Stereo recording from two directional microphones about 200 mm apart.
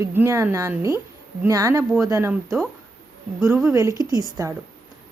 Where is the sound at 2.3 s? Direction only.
Centre (ahead or behind).